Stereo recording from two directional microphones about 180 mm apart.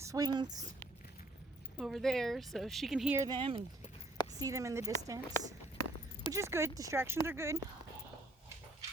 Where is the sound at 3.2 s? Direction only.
25° right (ahead or behind).